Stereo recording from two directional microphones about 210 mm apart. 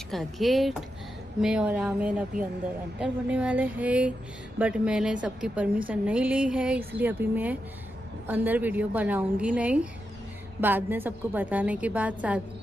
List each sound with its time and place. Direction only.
0.1 s a woman's voice: centre (ahead or behind)